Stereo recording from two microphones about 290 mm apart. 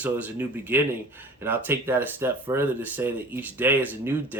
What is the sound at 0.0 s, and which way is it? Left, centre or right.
Speech, centre.